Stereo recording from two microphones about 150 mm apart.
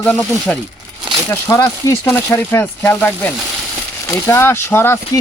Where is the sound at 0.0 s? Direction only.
5° left (ahead or behind).